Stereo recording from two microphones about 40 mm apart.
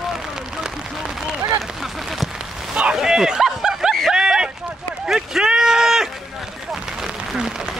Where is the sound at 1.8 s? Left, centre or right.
Centre.